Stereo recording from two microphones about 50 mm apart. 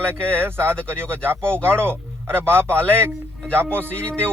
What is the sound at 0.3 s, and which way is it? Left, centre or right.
Speech, right.